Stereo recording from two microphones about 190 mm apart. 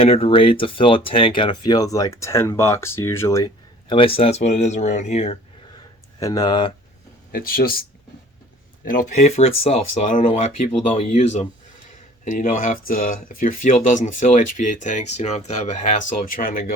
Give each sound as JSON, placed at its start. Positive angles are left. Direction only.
{"t": 0.0, "sound": "speech", "side_deg": 30}
{"t": 6.1, "sound": "speech", "side_deg": 20}
{"t": 7.3, "sound": "speech", "side_deg": 50}
{"t": 8.8, "sound": "speech", "side_deg": 45}